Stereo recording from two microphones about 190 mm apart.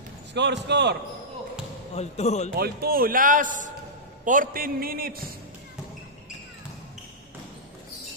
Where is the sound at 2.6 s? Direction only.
50° right (ahead or behind).